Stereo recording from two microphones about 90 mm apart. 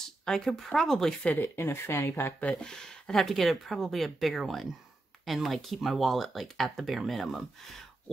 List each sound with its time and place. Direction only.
0.0 s speech: 5° left (ahead or behind)
1.3 s speech: 25° left (ahead or behind)
2.4 s speech: 5° left (ahead or behind)